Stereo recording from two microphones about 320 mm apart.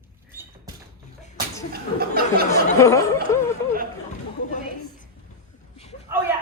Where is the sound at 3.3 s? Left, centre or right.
Centre.